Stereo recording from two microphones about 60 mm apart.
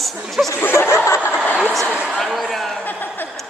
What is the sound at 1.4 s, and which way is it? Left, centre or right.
Speech, left.